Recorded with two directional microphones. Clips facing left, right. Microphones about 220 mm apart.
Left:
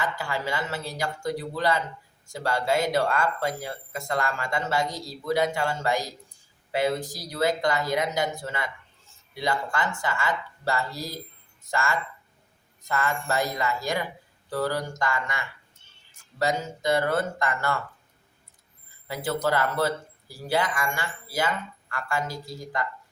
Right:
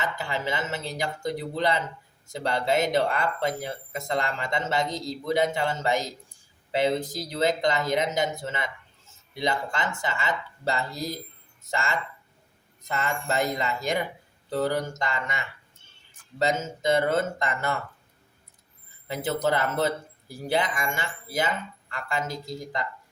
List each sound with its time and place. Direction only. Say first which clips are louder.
0.0 s speech: even; 20° right (ahead or behind)
19.0 s speech: right 1 dB; 20° right (ahead or behind)